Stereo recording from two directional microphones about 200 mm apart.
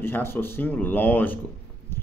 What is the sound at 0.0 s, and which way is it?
Speech, 10° left (ahead or behind).